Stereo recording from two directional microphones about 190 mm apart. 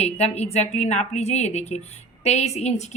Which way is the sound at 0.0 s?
35° left (ahead or behind).